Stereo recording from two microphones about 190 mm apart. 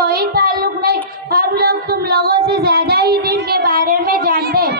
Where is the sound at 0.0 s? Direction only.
55° right (ahead or behind).